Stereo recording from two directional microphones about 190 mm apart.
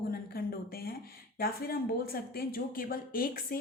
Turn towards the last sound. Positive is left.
turn(degrees=50)  # may be behind; listen again after turning